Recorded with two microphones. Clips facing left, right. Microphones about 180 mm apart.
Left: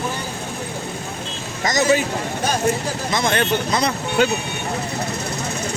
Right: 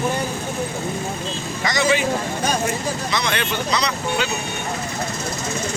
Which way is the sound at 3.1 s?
45° left (ahead or behind).